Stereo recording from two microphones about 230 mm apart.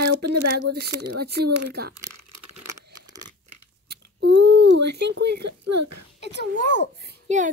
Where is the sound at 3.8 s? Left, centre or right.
Right.